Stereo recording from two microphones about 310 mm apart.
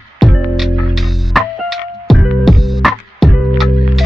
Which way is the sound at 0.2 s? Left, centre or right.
Centre.